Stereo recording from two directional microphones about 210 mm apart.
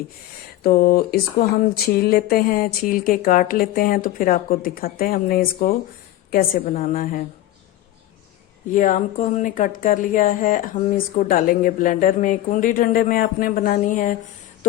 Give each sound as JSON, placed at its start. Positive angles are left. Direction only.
{"t": 0.6, "sound": "a sound", "side_deg": 45}
{"t": 6.3, "sound": "speech", "side_deg": 40}
{"t": 8.7, "sound": "speech", "side_deg": 40}